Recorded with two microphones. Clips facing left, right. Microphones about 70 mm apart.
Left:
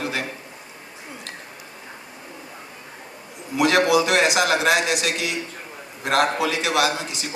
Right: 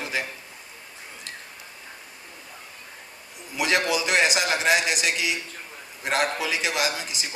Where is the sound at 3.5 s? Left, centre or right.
Left.